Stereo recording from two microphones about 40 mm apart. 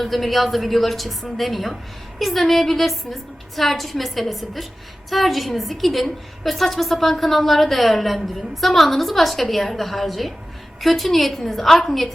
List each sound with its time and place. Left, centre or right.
0.0 s a woman's voice: centre